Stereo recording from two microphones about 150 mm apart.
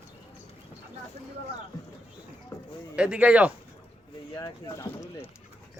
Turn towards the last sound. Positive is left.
turn(degrees=25)  # may be behind; listen again after turning